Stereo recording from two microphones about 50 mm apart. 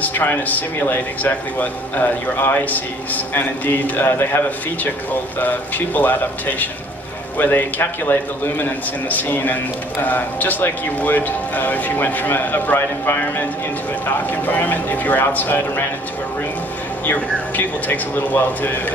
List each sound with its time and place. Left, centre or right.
0.0 s a man's voice: left
2.3 s a man's voice: left
2.6 s a man's voice: left
4.0 s a man's voice: left
17.0 s a man's voice: left